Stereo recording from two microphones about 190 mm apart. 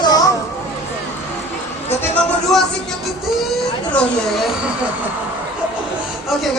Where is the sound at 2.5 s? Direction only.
Centre (ahead or behind).